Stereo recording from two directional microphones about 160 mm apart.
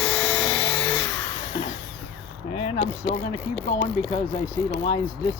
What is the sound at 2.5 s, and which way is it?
Mechanisms, 35° left (ahead or behind).